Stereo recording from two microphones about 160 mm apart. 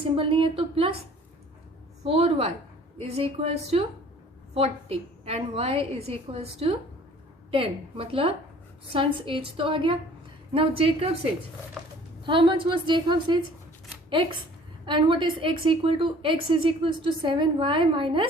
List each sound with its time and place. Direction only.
0.0 s a woman's voice: 35° right (ahead or behind)
2.0 s a woman's voice: 40° right (ahead or behind)